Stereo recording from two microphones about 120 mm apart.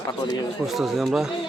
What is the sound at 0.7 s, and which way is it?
Speech, centre (ahead or behind).